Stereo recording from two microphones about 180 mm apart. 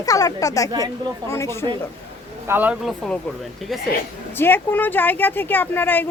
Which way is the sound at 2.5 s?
10° right (ahead or behind).